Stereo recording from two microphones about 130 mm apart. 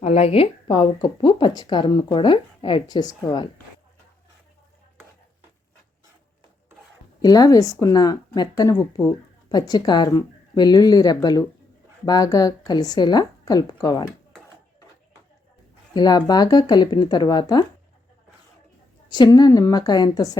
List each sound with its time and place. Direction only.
0.0 s a woman's voice: 55° left (ahead or behind); by 3.5 s 35° left (ahead or behind)
7.2 s a woman's voice: 30° left (ahead or behind)
16.0 s a woman's voice: 35° left (ahead or behind)
19.1 s a woman's voice: 35° left (ahead or behind)